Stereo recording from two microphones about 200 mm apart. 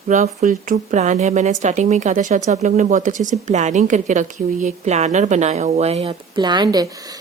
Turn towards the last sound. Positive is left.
turn(degrees=-20)  # may be behind; listen again after turning